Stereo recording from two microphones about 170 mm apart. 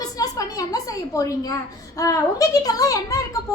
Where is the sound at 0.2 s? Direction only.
20° left (ahead or behind).